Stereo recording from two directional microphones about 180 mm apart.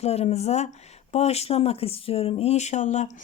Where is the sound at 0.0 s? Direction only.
35° left (ahead or behind).